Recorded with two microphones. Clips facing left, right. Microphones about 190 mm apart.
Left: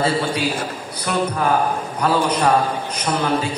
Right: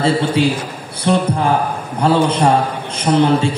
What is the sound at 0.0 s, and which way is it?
A man's voice, 25° right (ahead or behind).